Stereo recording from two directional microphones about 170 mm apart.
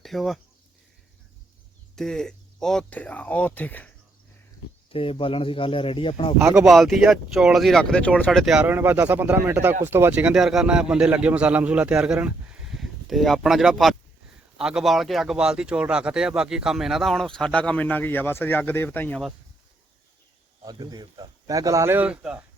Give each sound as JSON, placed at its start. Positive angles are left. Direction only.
{"t": 0.0, "sound": "speech", "side_deg": 0}
{"t": 2.0, "sound": "speech", "side_deg": 5}
{"t": 4.9, "sound": "speech", "side_deg": 30}
{"t": 6.4, "sound": "speech", "side_deg": -5}
{"t": 20.7, "sound": "speech", "side_deg": -25}